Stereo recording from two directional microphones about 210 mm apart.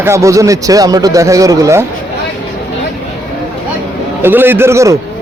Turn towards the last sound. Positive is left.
turn(degrees=-15)  # may be behind; listen again after turning